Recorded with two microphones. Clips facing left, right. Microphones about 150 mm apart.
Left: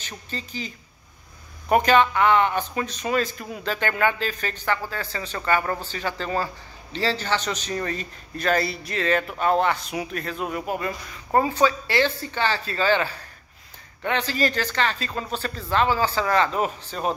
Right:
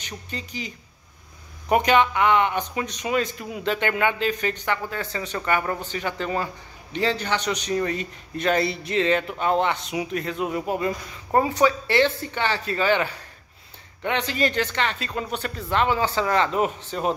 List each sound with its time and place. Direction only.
0.0 s speech: 15° right (ahead or behind)